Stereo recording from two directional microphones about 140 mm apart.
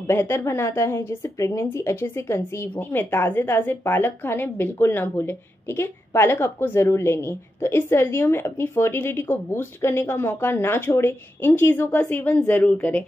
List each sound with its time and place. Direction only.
0.0 s a woman's voice: 20° left (ahead or behind)